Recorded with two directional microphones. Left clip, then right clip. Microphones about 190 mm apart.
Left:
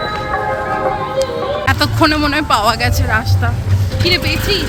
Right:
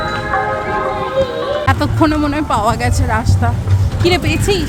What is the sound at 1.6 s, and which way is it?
Speech, 10° right (ahead or behind).